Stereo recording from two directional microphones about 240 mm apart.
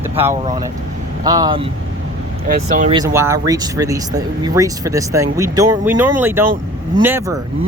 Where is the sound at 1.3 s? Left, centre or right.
Centre.